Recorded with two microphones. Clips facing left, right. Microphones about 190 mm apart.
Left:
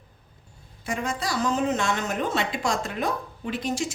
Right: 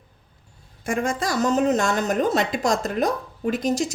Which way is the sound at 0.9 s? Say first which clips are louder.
Right 5 dB; 50° right (ahead or behind).